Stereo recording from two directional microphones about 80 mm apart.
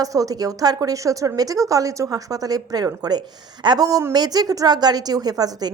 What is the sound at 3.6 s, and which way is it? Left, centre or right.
Speech, right.